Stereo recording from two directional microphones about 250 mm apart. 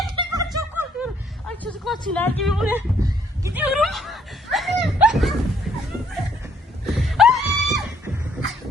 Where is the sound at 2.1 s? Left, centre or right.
Centre.